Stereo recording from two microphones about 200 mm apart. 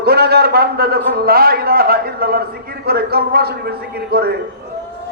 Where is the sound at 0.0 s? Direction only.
55° right (ahead or behind).